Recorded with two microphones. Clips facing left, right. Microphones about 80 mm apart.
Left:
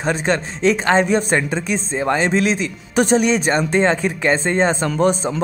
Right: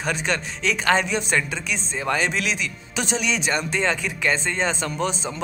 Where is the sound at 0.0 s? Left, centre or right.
Left.